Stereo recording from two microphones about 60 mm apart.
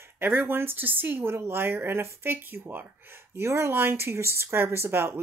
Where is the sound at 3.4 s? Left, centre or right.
Right.